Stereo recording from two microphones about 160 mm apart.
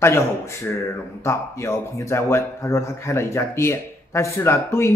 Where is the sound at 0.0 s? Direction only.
15° left (ahead or behind).